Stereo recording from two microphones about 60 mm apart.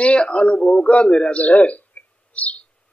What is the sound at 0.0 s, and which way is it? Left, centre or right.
A man's voice, centre.